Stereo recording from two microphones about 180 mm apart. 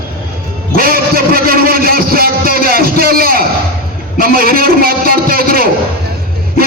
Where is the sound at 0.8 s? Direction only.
55° right (ahead or behind).